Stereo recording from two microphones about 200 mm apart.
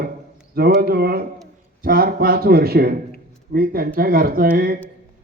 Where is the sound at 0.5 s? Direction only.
50° right (ahead or behind).